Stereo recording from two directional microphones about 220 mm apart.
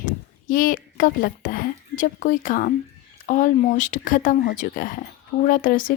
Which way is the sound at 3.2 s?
35° left (ahead or behind).